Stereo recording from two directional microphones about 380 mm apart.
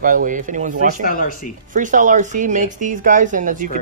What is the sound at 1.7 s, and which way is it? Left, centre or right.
Speech, centre.